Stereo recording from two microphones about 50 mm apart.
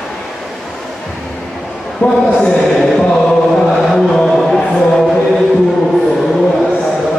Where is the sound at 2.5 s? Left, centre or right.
Centre.